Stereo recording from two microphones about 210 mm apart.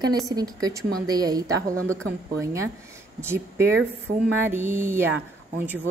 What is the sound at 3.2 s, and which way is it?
A woman's voice, 10° right (ahead or behind).